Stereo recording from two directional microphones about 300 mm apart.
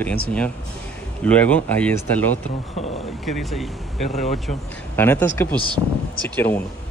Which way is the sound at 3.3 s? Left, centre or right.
Centre.